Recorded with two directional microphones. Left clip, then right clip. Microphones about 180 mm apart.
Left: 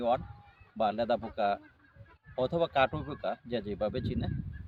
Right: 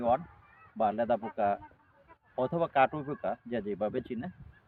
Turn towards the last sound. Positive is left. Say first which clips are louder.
# even
turn(degrees=20)  # may be behind; listen again after turning